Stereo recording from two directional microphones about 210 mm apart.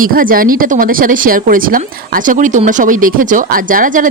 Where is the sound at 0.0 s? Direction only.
40° right (ahead or behind).